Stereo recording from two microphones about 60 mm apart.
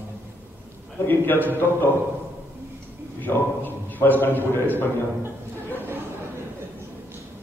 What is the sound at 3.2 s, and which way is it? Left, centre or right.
A man's voice, left.